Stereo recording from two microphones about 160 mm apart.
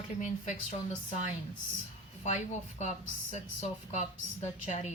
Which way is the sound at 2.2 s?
45° left (ahead or behind).